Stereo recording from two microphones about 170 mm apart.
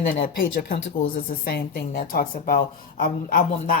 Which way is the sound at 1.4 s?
70° left (ahead or behind).